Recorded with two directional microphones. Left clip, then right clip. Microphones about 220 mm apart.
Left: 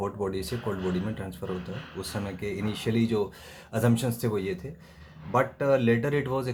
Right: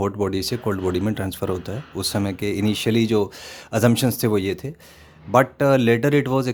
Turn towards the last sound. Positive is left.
turn(degrees=-45)  # may be behind; listen again after turning